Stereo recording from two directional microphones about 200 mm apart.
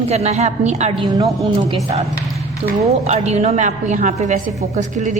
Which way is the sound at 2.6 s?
35° right (ahead or behind).